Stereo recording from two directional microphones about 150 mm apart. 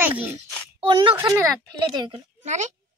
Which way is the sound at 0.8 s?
35° right (ahead or behind).